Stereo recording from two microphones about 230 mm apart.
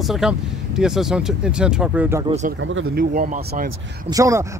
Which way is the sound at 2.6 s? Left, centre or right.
Right.